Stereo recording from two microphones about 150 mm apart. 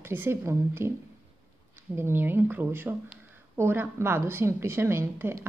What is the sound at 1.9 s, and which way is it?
Speech, 15° right (ahead or behind).